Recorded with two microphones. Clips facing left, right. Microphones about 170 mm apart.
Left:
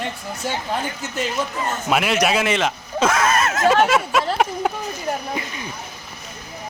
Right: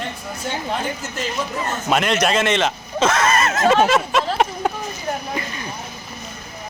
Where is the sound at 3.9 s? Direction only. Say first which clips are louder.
Right 1 dB; 5° left (ahead or behind).